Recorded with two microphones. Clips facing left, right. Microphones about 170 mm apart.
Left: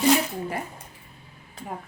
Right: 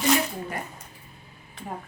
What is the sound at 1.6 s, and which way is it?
Speech, 40° left (ahead or behind).